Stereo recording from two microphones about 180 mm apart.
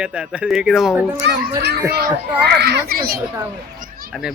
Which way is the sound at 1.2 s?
70° right (ahead or behind).